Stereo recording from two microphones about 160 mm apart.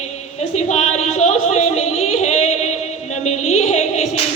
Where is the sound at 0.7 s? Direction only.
45° left (ahead or behind).